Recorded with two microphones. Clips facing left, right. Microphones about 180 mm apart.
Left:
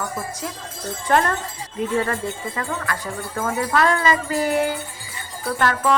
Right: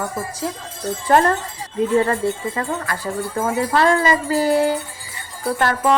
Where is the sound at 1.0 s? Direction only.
30° right (ahead or behind).